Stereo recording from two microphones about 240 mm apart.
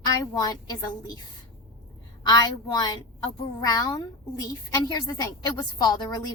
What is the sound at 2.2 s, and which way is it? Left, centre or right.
A woman's voice, centre.